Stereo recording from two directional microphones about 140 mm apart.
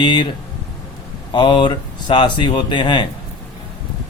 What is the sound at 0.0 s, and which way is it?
Speech, 35° left (ahead or behind).